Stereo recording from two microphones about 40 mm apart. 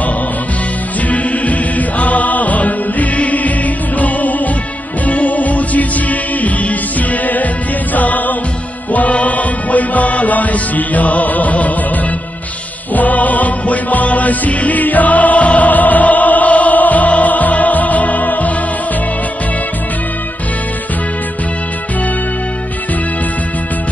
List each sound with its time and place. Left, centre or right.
1.0 s music: left
12.9 s music: left